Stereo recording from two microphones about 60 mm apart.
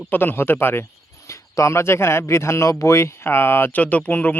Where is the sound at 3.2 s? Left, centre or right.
Left.